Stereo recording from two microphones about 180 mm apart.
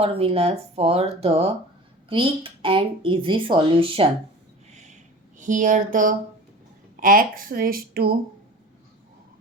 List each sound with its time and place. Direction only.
0.0 s speech: 30° right (ahead or behind)
4.7 s a sound: 40° right (ahead or behind)
5.4 s speech: 45° right (ahead or behind)